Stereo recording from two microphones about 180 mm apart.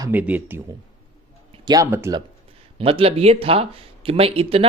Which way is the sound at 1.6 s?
20° right (ahead or behind).